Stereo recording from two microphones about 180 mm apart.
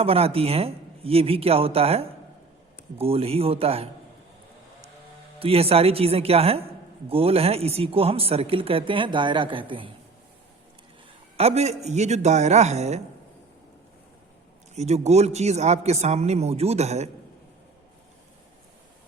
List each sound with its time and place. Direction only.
0.0 s speech: 35° right (ahead or behind)
5.4 s speech: 35° right (ahead or behind)
11.3 s speech: 35° right (ahead or behind)
14.8 s speech: 35° right (ahead or behind)